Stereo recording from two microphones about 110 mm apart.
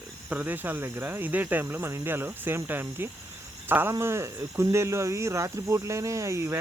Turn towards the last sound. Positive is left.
turn(degrees=-25)  # may be behind; listen again after turning